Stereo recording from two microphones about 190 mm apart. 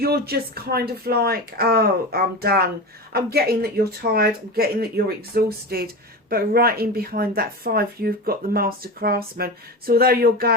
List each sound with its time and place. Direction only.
0.0 s speech: 55° right (ahead or behind)